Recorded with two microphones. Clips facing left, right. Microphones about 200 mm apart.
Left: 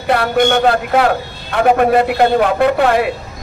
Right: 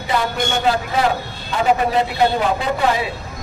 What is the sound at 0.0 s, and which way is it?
A man's voice, 60° left (ahead or behind).